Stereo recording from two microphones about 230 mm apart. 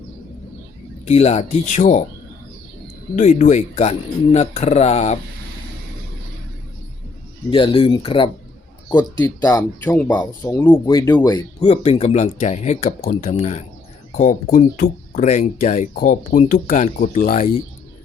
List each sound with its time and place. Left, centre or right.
1.0 s speech: left
3.2 s speech: left
7.5 s speech: left